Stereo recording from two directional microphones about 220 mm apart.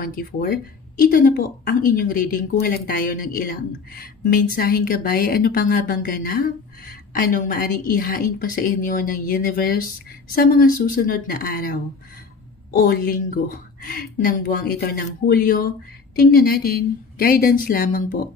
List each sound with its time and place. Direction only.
0.0 s speech: 40° left (ahead or behind)